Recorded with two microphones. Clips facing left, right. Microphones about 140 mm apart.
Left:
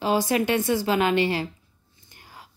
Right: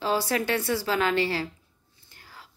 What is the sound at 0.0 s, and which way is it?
A woman's voice, 15° left (ahead or behind).